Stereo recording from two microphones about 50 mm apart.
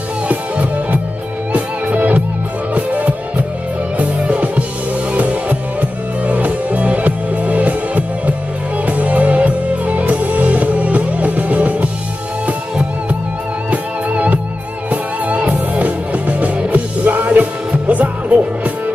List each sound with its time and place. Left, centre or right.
1.5 s music: right
13.7 s music: right